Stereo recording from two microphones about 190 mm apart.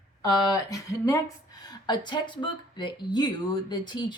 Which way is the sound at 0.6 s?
15° left (ahead or behind).